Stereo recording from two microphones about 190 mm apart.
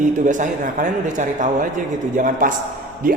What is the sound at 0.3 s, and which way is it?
A man's voice, 40° right (ahead or behind).